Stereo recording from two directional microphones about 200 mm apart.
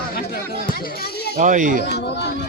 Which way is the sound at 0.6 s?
45° left (ahead or behind).